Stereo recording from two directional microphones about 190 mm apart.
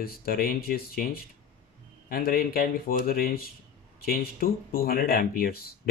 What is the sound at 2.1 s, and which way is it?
Speech, 50° left (ahead or behind).